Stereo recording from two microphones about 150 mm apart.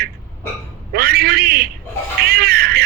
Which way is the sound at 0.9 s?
90° right.